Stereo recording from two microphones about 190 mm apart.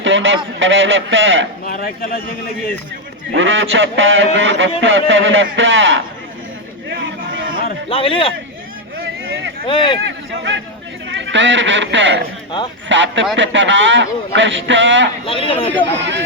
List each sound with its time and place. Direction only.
0.0 s honk: 85° right
0.6 s speech: 80° right
1.6 s speech: 50° left (ahead or behind)
3.3 s speech: 80° right
6.9 s a sound: 70° right (ahead or behind)
7.9 s a man's voice: 30° left (ahead or behind)
9.3 s a sound: 60° right (ahead or behind)
9.6 s a man's voice: 25° left (ahead or behind)
10.1 s a man's voice: 70° right (ahead or behind)
15.3 s a man's voice: 30° left (ahead or behind)
15.7 s a man's voice: 65° right (ahead or behind)